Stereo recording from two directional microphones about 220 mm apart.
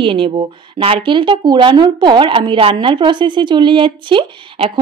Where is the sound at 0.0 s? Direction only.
25° right (ahead or behind).